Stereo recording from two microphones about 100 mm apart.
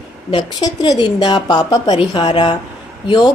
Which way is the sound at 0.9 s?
40° left (ahead or behind).